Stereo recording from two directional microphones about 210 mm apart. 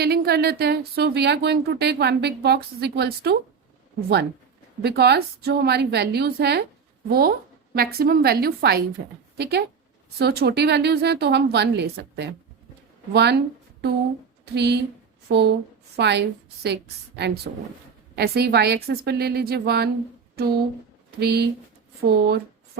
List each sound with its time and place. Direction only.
0.0 s a sound: 50° right (ahead or behind)
0.6 s a woman's voice: 50° right (ahead or behind)
4.8 s a woman's voice: 50° right (ahead or behind)
14.4 s a woman's voice: 50° right (ahead or behind)